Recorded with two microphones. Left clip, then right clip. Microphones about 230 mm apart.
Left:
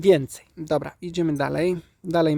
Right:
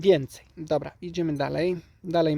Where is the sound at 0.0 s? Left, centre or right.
Centre.